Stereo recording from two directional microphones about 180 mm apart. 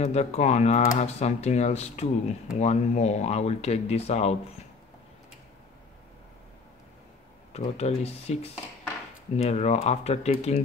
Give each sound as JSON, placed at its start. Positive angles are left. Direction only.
{"t": 0.0, "sound": "speech", "side_deg": 40}
{"t": 7.5, "sound": "speech", "side_deg": 35}